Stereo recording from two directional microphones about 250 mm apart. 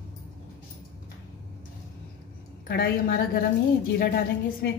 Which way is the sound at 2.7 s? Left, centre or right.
Left.